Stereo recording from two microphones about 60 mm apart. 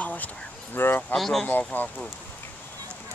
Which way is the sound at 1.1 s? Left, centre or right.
Centre.